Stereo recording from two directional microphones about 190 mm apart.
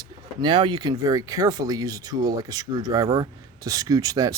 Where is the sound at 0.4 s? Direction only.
25° right (ahead or behind).